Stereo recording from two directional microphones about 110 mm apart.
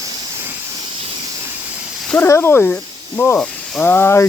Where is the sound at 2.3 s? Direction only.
20° left (ahead or behind).